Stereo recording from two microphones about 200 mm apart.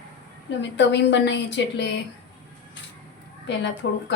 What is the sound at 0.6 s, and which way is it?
A woman's voice, 60° left (ahead or behind).